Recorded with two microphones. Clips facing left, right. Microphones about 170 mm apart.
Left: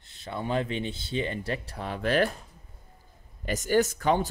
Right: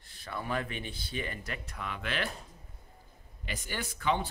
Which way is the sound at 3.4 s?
45° left (ahead or behind).